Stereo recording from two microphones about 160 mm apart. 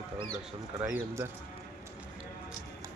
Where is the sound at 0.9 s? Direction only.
15° right (ahead or behind).